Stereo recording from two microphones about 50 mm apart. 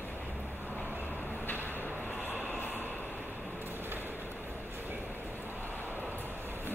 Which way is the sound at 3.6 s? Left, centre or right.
Right.